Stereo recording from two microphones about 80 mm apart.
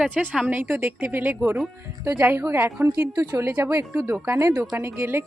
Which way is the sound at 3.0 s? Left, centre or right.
Right.